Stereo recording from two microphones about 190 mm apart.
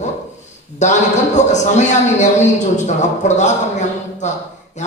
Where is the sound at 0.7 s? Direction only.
40° left (ahead or behind).